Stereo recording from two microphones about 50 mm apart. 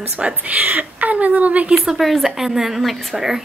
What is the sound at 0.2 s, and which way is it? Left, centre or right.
A woman's voice, right.